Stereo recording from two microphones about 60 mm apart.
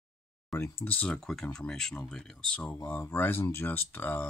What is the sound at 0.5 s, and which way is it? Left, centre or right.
Speech, left.